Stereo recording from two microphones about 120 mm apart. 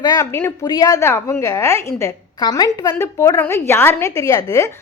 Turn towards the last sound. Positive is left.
turn(degrees=30)  # may be behind; listen again after turning